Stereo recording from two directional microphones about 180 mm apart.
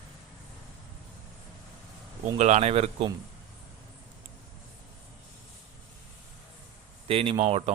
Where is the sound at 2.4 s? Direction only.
40° right (ahead or behind).